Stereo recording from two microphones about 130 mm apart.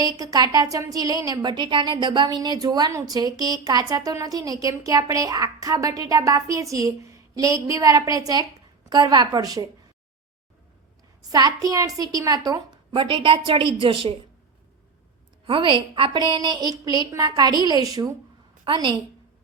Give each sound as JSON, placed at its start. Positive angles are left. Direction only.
{"t": 0.0, "sound": "a woman's voice", "side_deg": -30}
{"t": 11.3, "sound": "a woman's voice", "side_deg": -30}
{"t": 12.9, "sound": "a woman's voice", "side_deg": -40}
{"t": 15.4, "sound": "a woman's voice", "side_deg": -40}
{"t": 18.6, "sound": "a woman's voice", "side_deg": -40}